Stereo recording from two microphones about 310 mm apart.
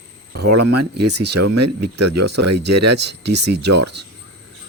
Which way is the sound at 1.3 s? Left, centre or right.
Right.